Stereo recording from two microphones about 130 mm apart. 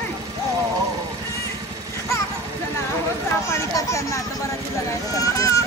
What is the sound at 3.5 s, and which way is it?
Speech, 25° left (ahead or behind).